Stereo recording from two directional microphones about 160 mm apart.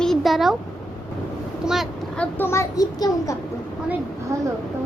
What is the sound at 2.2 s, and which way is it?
A child's voice, 15° left (ahead or behind).